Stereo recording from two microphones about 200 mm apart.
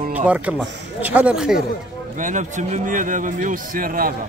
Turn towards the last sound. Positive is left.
turn(degrees=-45)  # may be behind; listen again after turning